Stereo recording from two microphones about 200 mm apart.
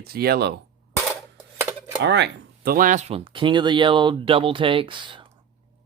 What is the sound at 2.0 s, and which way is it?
Speech, 60° right (ahead or behind).